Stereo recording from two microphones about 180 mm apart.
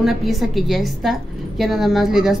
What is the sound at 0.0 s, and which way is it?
A woman's voice, centre (ahead or behind).